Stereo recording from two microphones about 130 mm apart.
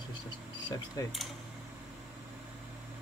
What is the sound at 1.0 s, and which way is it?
Speech, 30° left (ahead or behind).